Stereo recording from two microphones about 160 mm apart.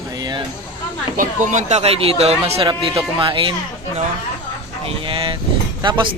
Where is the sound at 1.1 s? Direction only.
50° right (ahead or behind); by 3.5 s 30° right (ahead or behind).